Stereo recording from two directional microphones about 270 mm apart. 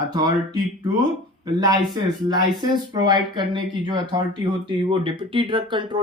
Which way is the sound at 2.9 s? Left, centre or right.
Centre.